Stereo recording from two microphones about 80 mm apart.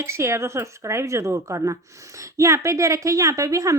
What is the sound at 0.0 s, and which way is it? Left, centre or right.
Speech, right.